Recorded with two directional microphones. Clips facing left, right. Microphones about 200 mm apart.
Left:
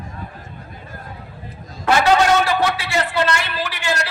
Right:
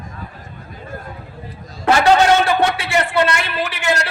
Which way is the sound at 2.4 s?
25° right (ahead or behind).